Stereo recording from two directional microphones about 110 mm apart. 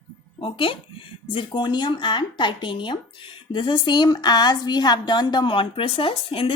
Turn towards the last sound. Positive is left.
turn(degrees=55)  # may be behind; listen again after turning